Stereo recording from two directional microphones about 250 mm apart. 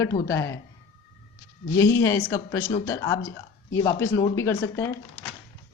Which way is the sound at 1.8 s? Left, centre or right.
Centre.